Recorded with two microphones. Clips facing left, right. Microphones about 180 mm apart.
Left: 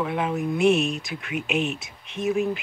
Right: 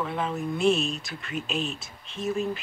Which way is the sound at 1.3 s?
70° left (ahead or behind).